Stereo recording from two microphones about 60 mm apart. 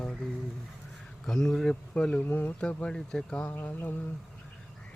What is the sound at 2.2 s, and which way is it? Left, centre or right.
Speech, left.